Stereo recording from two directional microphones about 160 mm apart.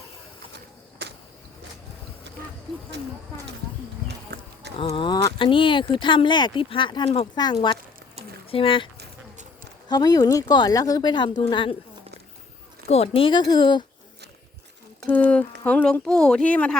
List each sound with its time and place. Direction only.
4.3 s clip-clop: 70° right (ahead or behind)
4.8 s speech: 30° left (ahead or behind)
9.9 s speech: 25° left (ahead or behind)
12.9 s speech: 35° left (ahead or behind)
15.0 s speech: 10° left (ahead or behind)